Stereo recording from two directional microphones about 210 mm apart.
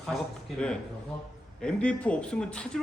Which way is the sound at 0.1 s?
Centre (ahead or behind).